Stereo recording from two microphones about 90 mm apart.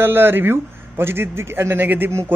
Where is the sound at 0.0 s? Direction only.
25° right (ahead or behind).